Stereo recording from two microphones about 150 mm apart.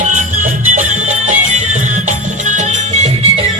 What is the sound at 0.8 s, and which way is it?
Music, 55° right (ahead or behind).